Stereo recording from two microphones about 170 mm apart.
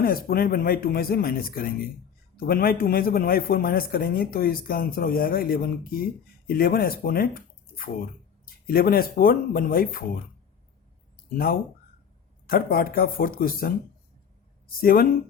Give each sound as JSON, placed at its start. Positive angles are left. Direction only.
{"t": 0.0, "sound": "a man's voice", "side_deg": 60}
{"t": 12.5, "sound": "a man's voice", "side_deg": 60}
{"t": 14.8, "sound": "a man's voice", "side_deg": 60}